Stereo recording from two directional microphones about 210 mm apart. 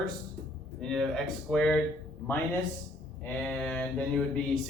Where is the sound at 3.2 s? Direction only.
5° left (ahead or behind).